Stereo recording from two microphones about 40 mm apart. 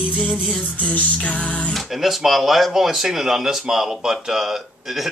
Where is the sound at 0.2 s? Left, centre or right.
Centre.